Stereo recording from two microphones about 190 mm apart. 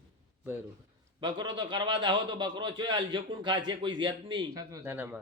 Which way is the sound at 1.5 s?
25° right (ahead or behind).